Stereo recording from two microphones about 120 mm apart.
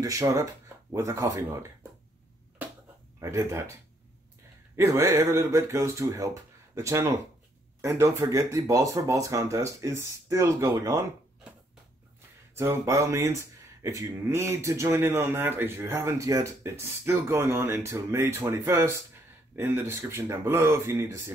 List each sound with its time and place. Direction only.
0.0 s speech: 25° right (ahead or behind)
3.2 s speech: 25° right (ahead or behind)
4.7 s speech: 25° right (ahead or behind)
12.5 s speech: 25° right (ahead or behind)